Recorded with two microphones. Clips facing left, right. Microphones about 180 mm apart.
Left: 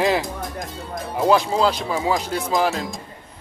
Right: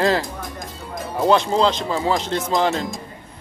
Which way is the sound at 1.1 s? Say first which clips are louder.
Right 1 dB; 5° left (ahead or behind).